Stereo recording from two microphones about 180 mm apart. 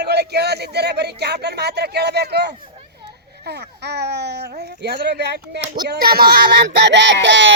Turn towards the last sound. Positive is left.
turn(degrees=-90)